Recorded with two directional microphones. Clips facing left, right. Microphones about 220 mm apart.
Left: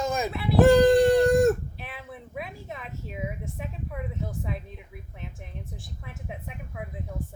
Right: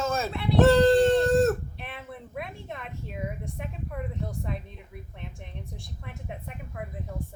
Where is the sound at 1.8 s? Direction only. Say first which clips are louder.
Right 1 dB; centre (ahead or behind).